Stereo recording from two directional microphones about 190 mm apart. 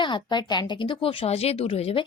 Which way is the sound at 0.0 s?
25° left (ahead or behind).